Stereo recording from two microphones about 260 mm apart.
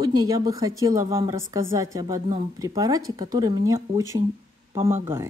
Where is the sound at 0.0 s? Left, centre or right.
Centre.